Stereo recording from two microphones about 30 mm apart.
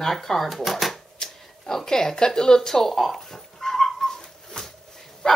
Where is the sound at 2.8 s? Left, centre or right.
Centre.